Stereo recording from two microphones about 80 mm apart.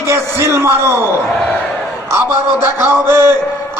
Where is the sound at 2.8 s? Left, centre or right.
Right.